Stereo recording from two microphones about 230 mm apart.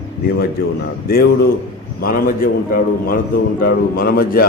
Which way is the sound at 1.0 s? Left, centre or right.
Left.